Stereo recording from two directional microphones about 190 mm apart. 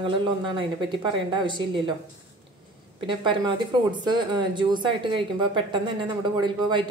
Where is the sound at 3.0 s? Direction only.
25° right (ahead or behind).